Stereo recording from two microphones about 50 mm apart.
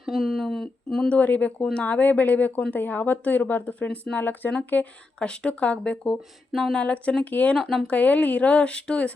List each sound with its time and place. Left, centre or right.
0.0 s speech: centre
1.0 s speech: left
5.2 s speech: left
7.5 s speech: centre
7.9 s speech: left